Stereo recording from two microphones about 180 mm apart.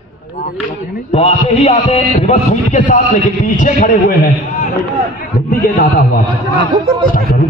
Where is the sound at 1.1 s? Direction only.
35° left (ahead or behind).